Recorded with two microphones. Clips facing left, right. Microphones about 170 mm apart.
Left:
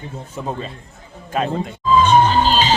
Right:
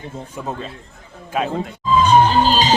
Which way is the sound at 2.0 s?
40° right (ahead or behind).